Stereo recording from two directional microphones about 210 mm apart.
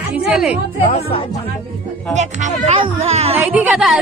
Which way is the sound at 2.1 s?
30° right (ahead or behind).